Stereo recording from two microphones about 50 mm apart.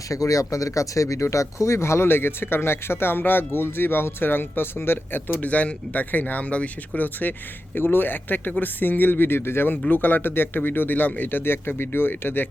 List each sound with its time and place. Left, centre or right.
0.1 s speech: left
5.4 s speech: left